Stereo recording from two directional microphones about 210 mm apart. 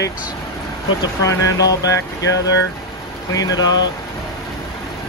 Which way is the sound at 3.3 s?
20° left (ahead or behind).